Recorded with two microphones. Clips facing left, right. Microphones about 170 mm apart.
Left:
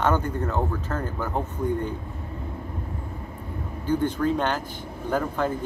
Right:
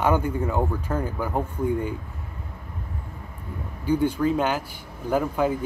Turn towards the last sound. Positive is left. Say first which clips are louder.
# right 2 dB
turn(degrees=-10)  # may be behind; listen again after turning